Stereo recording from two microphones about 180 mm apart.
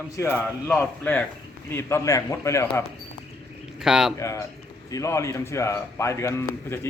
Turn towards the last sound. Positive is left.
turn(degrees=15)  # may be behind; listen again after turning